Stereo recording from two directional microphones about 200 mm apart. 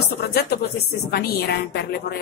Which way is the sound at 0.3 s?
55° left (ahead or behind).